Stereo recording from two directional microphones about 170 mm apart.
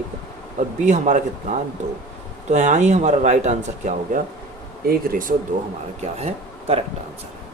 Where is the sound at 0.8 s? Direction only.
45° right (ahead or behind).